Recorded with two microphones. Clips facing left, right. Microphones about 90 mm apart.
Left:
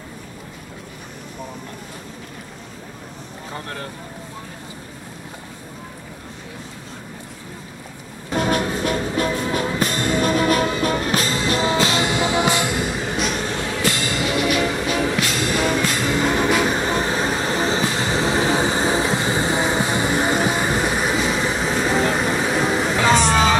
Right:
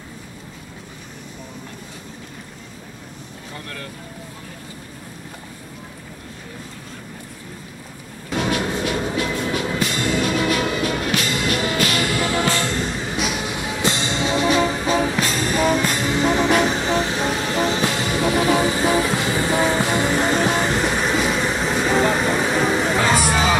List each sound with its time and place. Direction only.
3.5 s speech: 30° left (ahead or behind)
8.3 s music: 40° left (ahead or behind); by 13.2 s 5° left (ahead or behind)
13.2 s music: 10° right (ahead or behind); by 16.0 s 45° right (ahead or behind)
16.0 s music: 50° left (ahead or behind)
16.6 s train: 45° left (ahead or behind); by 19.1 s 25° left (ahead or behind)
19.2 s vehicle: 20° left (ahead or behind); by 22.9 s centre (ahead or behind)